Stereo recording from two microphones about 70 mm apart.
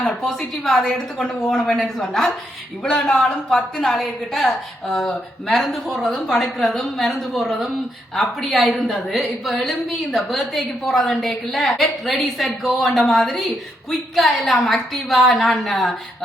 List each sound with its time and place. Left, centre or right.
0.2 s a woman's voice: centre